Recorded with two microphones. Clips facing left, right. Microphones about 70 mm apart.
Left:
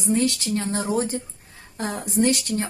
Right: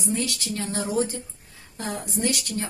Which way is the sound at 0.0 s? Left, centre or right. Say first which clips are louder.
Left 6 dB; left.